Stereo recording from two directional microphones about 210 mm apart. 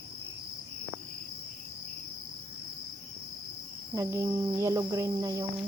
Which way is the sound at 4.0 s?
15° right (ahead or behind).